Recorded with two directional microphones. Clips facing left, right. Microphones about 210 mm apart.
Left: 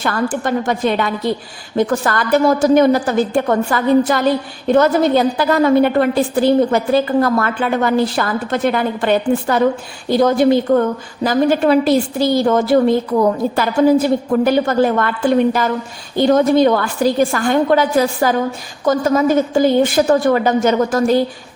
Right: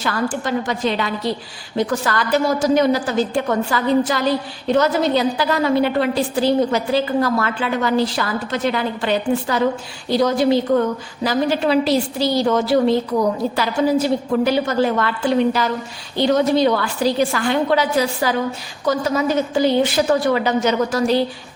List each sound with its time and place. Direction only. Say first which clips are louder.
0.0 s a woman's voice: left 3 dB; 55° left (ahead or behind)